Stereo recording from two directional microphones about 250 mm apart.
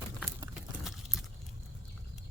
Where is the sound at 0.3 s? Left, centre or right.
Centre.